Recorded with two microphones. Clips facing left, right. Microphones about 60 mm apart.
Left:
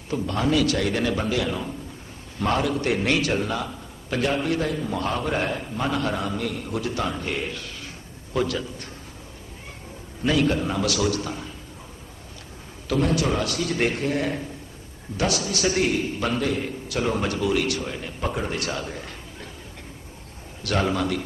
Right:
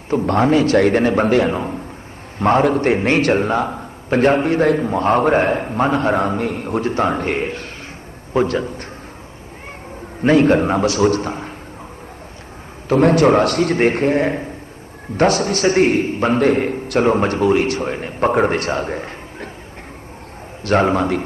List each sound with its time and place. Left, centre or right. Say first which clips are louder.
0.3 s a man's voice: right 8 dB; right
10.2 s a man's voice: right 9 dB; right
12.9 s a man's voice: right 11 dB; right
20.7 s a man's voice: right 8 dB; right